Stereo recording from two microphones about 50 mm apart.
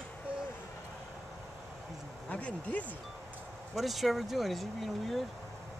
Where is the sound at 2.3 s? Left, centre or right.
Left.